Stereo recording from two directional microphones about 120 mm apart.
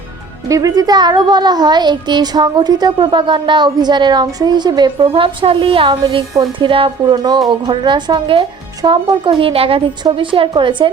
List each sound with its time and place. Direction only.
0.4 s a child's voice: 30° right (ahead or behind)